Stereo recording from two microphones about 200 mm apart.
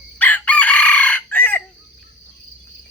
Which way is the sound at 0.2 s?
10° left (ahead or behind).